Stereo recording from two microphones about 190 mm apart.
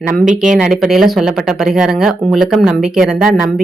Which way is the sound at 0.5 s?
5° right (ahead or behind).